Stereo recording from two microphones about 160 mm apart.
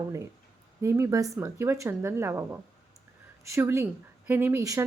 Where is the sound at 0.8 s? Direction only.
15° right (ahead or behind).